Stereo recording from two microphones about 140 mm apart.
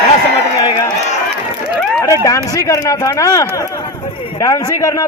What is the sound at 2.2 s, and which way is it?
A man's voice, 25° left (ahead or behind).